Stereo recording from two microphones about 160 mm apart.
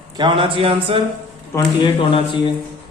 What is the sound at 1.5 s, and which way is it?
Speech, 30° left (ahead or behind).